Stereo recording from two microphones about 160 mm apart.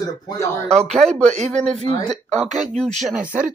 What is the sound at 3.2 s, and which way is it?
Speech, 55° right (ahead or behind).